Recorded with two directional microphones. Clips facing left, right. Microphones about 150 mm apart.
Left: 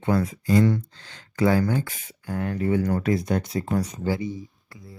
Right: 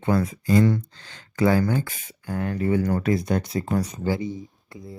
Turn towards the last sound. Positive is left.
turn(degrees=-25)  # may be behind; listen again after turning